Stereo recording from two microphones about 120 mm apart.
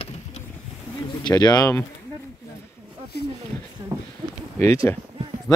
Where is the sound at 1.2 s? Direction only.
35° left (ahead or behind).